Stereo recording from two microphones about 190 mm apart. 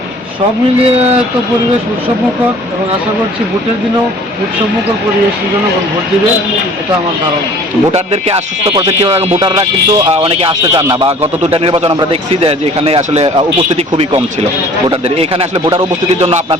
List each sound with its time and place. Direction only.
0.8 s speech: 35° right (ahead or behind)
7.9 s speech: 35° right (ahead or behind)
8.7 s a man's voice: 20° right (ahead or behind)